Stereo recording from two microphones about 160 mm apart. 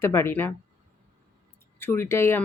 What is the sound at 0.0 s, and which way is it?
Speech, 15° left (ahead or behind).